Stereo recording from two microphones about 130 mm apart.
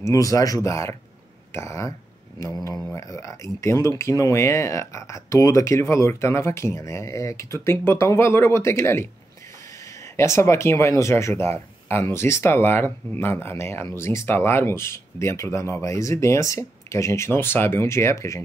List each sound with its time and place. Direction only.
0.0 s speech: 25° left (ahead or behind)